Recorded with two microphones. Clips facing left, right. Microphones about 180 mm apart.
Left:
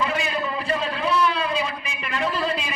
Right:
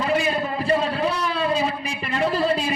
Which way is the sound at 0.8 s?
40° right (ahead or behind).